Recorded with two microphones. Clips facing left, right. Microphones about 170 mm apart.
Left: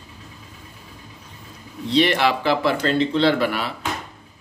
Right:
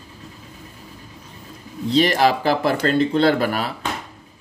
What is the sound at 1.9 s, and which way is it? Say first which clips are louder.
Speech: right 2 dB; 40° right (ahead or behind).